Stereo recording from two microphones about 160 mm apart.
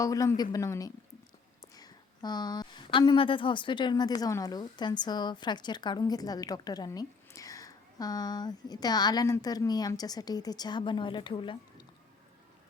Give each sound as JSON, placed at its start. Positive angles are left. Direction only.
{"t": 0.0, "sound": "a woman's voice", "side_deg": 20}